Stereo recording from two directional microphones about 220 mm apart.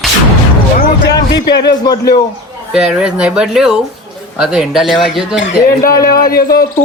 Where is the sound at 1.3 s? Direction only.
50° left (ahead or behind).